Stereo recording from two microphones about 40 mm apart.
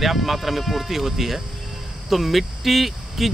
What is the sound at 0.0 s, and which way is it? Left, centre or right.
Speech, centre.